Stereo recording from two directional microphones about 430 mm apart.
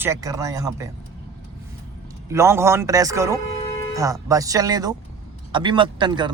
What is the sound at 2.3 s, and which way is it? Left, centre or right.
Speech, centre.